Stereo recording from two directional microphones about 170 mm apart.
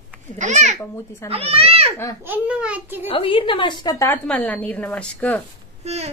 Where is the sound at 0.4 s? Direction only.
45° right (ahead or behind).